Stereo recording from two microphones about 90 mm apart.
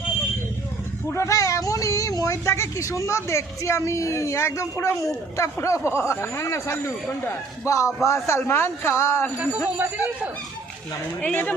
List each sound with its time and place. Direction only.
1.1 s speech: 35° left (ahead or behind)
9.4 s speech: 15° right (ahead or behind)
11.2 s speech: 15° left (ahead or behind)